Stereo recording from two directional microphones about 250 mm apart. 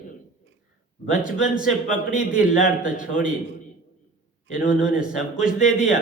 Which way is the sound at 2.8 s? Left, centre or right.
Left.